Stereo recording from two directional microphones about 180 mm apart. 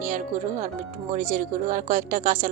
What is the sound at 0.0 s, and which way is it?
Speech, 45° right (ahead or behind).